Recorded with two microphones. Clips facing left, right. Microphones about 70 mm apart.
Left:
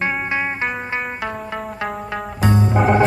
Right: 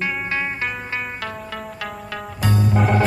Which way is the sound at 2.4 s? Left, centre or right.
Left.